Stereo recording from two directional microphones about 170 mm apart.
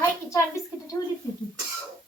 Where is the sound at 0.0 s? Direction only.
15° left (ahead or behind).